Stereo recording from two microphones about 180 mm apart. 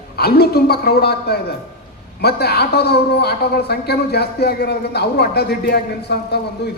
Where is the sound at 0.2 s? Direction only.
60° left (ahead or behind).